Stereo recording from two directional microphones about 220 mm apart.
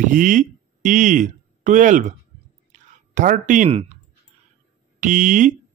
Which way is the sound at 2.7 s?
35° right (ahead or behind).